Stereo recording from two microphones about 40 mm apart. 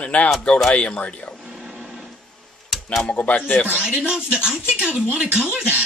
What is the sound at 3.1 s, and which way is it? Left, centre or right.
Speech, left.